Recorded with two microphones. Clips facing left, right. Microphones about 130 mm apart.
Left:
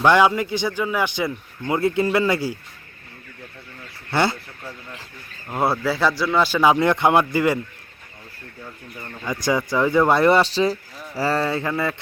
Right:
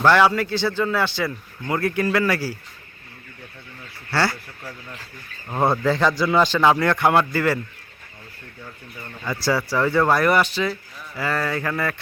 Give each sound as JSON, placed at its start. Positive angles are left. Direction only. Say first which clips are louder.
{"t": 0.0, "sound": "speech", "louder": "left 1 dB", "side_deg": 15}
{"t": 4.1, "sound": "speech", "louder": "left 2 dB", "side_deg": 20}
{"t": 5.5, "sound": "a man's voice", "louder": "right 2 dB", "side_deg": 5}
{"t": 6.7, "sound": "speech", "louder": "left 1 dB", "side_deg": 20}
{"t": 9.0, "sound": "speech", "louder": "left 1 dB", "side_deg": 15}